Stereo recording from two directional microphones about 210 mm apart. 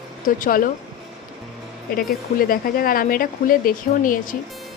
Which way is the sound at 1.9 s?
45° left (ahead or behind).